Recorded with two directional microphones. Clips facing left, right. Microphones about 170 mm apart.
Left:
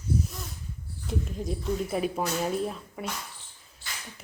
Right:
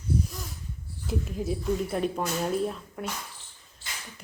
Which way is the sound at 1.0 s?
Centre (ahead or behind).